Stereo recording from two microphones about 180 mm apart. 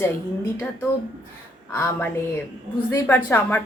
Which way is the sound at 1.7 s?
10° left (ahead or behind).